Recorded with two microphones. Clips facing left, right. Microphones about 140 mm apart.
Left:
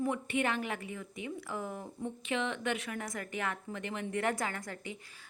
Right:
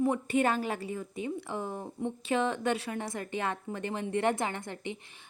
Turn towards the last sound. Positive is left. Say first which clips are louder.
# right 4 dB
turn(degrees=-25)  # may be behind; listen again after turning